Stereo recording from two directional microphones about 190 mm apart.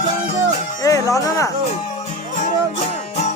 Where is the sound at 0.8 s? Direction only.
15° left (ahead or behind).